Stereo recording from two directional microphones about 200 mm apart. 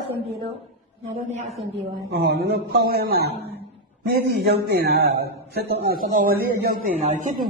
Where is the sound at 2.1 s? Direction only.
55° right (ahead or behind).